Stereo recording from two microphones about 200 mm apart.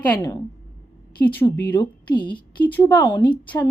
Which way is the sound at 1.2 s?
10° left (ahead or behind).